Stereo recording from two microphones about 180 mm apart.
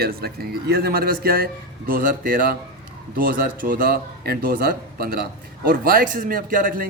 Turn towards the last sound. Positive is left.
turn(degrees=-50)  # may be behind; listen again after turning